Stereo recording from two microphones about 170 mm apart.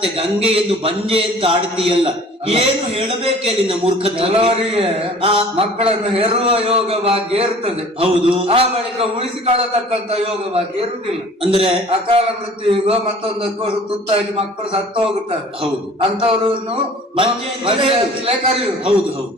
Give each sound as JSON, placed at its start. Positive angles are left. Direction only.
{"t": 0.0, "sound": "a man's voice", "side_deg": -35}
{"t": 14.1, "sound": "a man's voice", "side_deg": -35}
{"t": 17.7, "sound": "a man's voice", "side_deg": -35}